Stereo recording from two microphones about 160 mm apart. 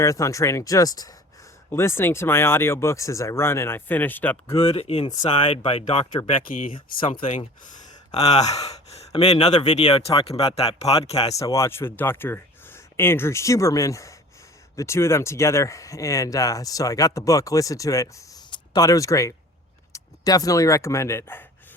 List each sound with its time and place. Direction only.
0.0 s speech: 20° left (ahead or behind)
4.5 s speech: 35° left (ahead or behind)
6.5 s speech: 60° left (ahead or behind)
8.1 s speech: 45° left (ahead or behind)
11.2 s speech: 20° left (ahead or behind)